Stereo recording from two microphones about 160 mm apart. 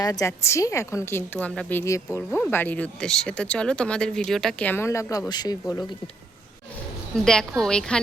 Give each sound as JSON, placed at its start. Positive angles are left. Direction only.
{"t": 0.0, "sound": "speech", "side_deg": 20}
{"t": 1.8, "sound": "speech", "side_deg": 20}
{"t": 7.3, "sound": "a woman's voice", "side_deg": 5}